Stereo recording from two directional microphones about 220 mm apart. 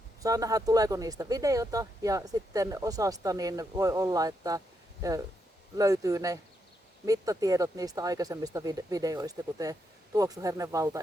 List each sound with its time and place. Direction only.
0.2 s speech: 15° right (ahead or behind)
5.7 s speech: 15° right (ahead or behind)